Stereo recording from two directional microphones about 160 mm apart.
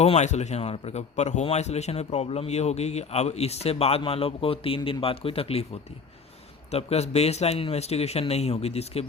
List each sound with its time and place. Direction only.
0.0 s speech: 45° left (ahead or behind)
6.7 s speech: 40° left (ahead or behind)